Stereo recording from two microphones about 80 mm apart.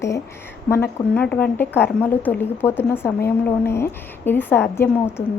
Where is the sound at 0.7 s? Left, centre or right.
Left.